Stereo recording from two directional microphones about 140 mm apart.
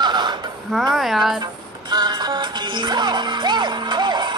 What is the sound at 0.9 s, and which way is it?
Speech, centre (ahead or behind).